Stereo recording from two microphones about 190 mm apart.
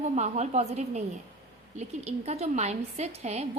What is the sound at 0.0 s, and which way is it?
A woman's voice, 35° right (ahead or behind).